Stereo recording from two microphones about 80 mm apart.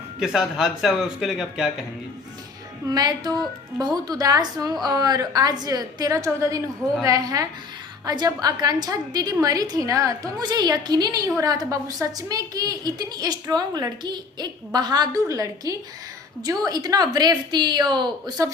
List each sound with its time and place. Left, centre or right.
0.2 s speech: centre
2.8 s a woman's voice: right
8.0 s a woman's voice: right
10.4 s a woman's voice: right